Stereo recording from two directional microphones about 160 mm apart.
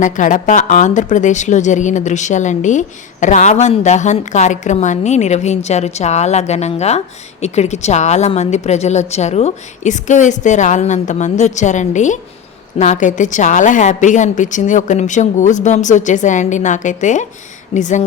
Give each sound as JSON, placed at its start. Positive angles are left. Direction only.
{"t": 0.0, "sound": "speech", "side_deg": 55}